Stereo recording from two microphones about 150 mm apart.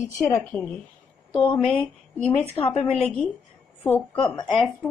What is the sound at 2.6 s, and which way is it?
Speech, 40° left (ahead or behind).